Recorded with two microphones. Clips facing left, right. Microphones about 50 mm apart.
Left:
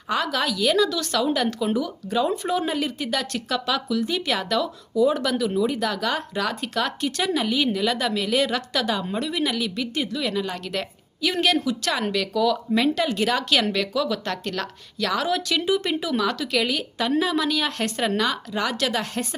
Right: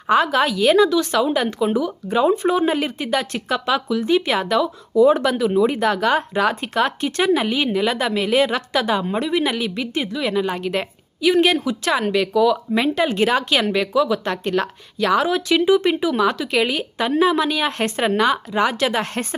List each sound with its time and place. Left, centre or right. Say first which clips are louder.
0.1 s speech: right 7 dB; right
0.9 s a woman's voice: right 5 dB; right
2.1 s a woman's voice: right 6 dB; right
4.9 s speech: right 6 dB; right
5.5 s a woman's voice: right 6 dB; right
19.0 s speech: right 3 dB; right